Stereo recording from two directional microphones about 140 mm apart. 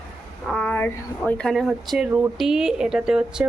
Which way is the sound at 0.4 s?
5° left (ahead or behind).